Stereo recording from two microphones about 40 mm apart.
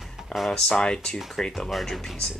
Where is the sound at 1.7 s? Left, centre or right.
Centre.